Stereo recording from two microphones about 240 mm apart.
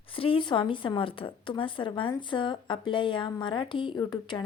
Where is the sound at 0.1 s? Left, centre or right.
Left.